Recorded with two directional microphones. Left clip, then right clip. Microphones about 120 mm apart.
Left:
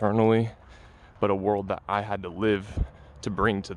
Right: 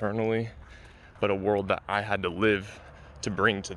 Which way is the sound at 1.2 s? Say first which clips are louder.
Left 2 dB; 65° left (ahead or behind).